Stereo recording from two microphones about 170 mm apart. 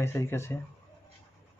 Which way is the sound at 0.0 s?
15° left (ahead or behind).